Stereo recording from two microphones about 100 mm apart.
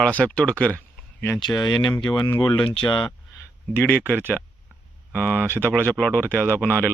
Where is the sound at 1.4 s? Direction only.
45° left (ahead or behind).